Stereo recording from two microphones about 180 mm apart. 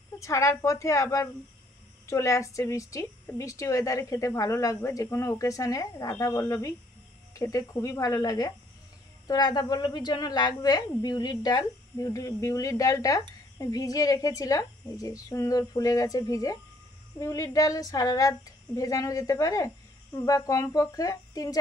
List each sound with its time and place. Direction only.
0.2 s a woman's voice: 15° left (ahead or behind)